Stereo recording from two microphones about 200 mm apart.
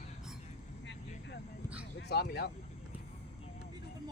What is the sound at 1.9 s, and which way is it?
Speech, 55° left (ahead or behind).